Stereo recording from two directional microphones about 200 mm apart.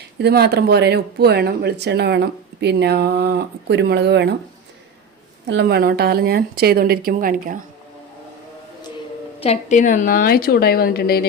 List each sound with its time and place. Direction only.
0.2 s speech: 55° right (ahead or behind)
5.5 s a woman's voice: 60° right (ahead or behind)
9.4 s a woman's voice: 35° left (ahead or behind); by 11.3 s 50° left (ahead or behind)